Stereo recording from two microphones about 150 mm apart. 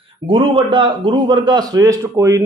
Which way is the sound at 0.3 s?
35° right (ahead or behind).